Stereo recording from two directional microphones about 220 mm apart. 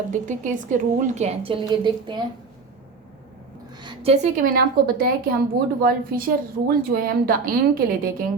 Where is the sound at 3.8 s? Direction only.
25° right (ahead or behind); by 5.1 s 45° right (ahead or behind).